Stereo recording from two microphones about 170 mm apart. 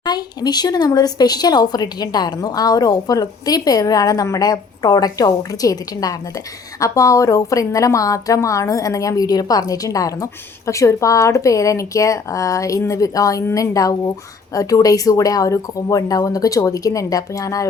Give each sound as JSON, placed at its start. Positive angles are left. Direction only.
{"t": 0.0, "sound": "speech", "side_deg": 25}